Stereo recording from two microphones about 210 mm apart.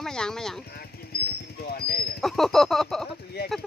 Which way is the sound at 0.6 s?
50° left (ahead or behind).